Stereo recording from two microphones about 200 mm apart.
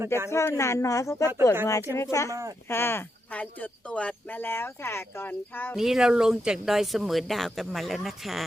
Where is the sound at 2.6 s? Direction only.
10° left (ahead or behind).